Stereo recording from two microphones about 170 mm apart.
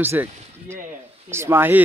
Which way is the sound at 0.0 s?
15° right (ahead or behind).